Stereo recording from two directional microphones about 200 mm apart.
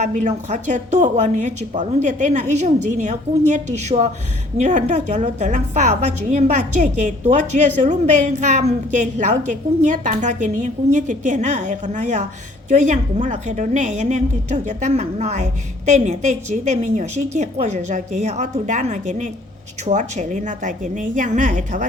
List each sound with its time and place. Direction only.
0.0 s a woman's voice: 35° right (ahead or behind)